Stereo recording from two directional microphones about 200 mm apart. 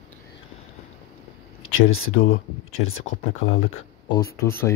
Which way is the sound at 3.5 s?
90° left.